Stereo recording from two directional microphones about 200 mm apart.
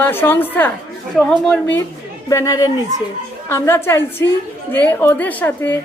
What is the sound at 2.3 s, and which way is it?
A woman's voice, 15° left (ahead or behind).